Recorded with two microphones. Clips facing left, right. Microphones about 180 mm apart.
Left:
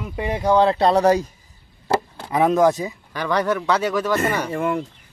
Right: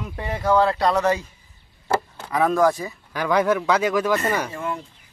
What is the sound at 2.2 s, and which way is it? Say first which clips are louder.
Speech: left 3 dB; 25° left (ahead or behind).